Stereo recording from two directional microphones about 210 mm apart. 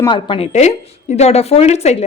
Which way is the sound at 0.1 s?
25° left (ahead or behind).